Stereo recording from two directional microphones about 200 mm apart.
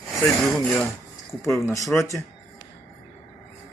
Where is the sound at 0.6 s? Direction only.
5° left (ahead or behind).